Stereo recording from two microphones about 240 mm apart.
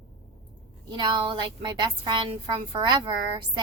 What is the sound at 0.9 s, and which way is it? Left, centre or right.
A woman's voice, centre.